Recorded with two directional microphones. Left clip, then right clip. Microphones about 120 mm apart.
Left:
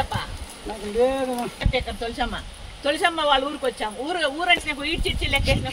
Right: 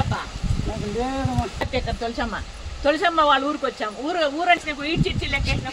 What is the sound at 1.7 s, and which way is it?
Speech, 15° right (ahead or behind).